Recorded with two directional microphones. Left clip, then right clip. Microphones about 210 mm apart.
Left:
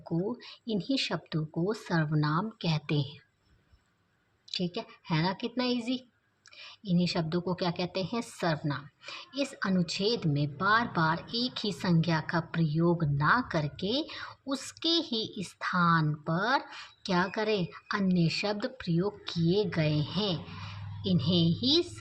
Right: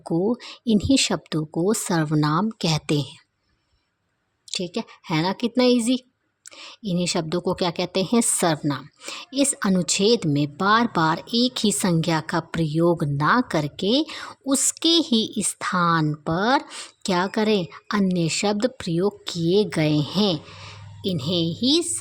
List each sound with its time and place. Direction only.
0.0 s speech: 60° right (ahead or behind)
4.5 s speech: 60° right (ahead or behind)